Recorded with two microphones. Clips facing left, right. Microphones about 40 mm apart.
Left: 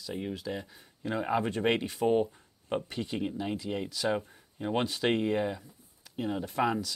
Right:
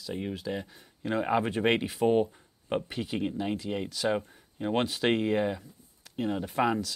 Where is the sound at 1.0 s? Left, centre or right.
Centre.